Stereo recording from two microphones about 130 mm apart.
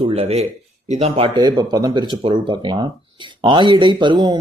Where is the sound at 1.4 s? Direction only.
30° right (ahead or behind).